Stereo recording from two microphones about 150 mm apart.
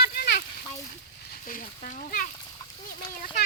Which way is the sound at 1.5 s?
60° left (ahead or behind).